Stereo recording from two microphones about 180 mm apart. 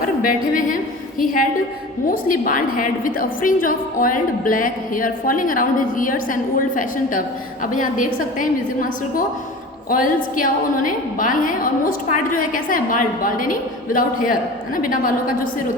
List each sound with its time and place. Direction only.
0.3 s a woman's voice: 50° left (ahead or behind)
2.0 s a woman's voice: 50° left (ahead or behind)